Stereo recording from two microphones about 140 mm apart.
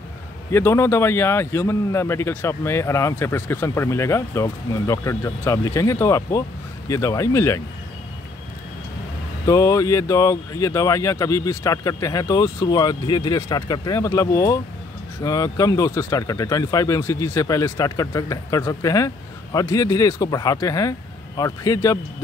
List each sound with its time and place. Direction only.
0.5 s a man's voice: 20° left (ahead or behind)
9.5 s a man's voice: 25° left (ahead or behind)